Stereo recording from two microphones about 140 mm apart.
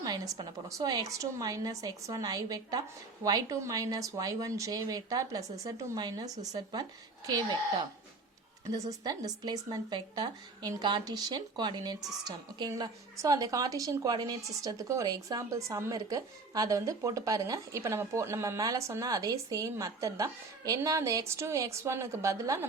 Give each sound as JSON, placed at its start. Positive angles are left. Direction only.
{"t": 0.0, "sound": "a woman's voice", "side_deg": -30}
{"t": 8.9, "sound": "a woman's voice", "side_deg": -25}